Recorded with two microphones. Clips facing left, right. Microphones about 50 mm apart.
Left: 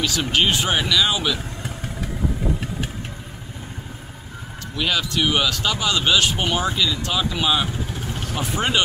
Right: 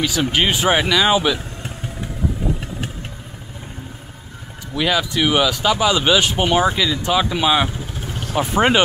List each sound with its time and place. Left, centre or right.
0.0 s speech: centre
4.7 s speech: centre